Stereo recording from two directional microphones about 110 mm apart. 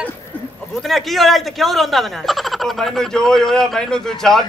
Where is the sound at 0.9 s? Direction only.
Centre (ahead or behind).